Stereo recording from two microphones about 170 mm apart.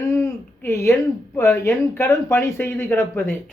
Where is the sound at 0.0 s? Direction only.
15° left (ahead or behind).